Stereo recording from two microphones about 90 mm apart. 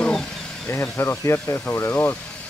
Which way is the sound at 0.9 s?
35° left (ahead or behind).